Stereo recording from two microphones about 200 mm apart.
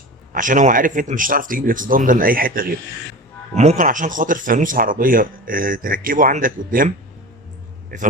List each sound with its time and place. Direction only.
0.3 s speech: 40° right (ahead or behind)